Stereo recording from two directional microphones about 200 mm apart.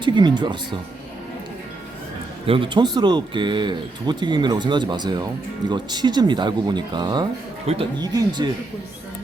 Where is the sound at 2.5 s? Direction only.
25° right (ahead or behind).